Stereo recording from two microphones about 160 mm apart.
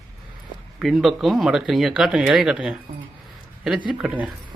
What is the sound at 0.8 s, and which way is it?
Speech, centre (ahead or behind).